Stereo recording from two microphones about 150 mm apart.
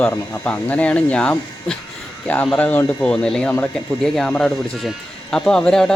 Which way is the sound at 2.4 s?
10° left (ahead or behind).